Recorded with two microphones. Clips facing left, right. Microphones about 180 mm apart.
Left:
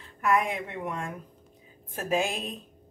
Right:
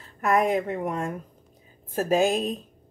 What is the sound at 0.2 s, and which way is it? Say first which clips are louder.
A woman's voice: right 4 dB; 40° right (ahead or behind).